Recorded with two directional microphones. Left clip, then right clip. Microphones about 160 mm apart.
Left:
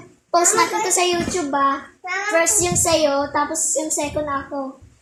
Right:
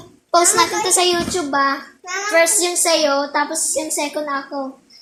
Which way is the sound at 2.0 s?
25° left (ahead or behind).